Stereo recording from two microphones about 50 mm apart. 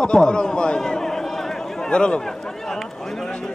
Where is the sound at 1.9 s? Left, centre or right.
Centre.